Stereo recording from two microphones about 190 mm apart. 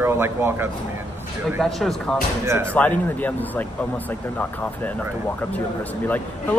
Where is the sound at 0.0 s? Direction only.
10° right (ahead or behind).